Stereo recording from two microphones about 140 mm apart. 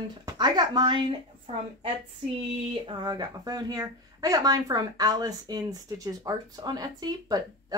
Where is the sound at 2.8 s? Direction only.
30° right (ahead or behind).